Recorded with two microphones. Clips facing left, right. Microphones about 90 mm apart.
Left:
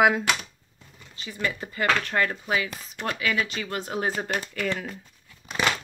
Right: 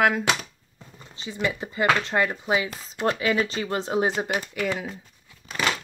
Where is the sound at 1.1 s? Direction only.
20° right (ahead or behind).